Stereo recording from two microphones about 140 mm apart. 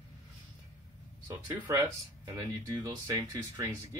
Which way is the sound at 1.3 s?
20° right (ahead or behind).